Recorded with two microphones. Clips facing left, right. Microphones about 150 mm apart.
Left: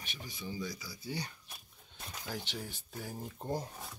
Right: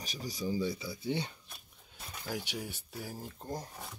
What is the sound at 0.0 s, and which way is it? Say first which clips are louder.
Speech: right 7 dB; 40° right (ahead or behind).